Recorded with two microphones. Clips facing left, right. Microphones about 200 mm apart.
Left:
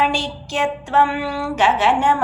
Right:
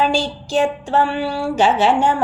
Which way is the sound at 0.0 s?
35° right (ahead or behind).